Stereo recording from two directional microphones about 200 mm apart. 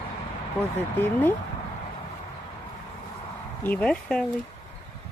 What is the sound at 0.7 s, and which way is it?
Speech, 10° left (ahead or behind).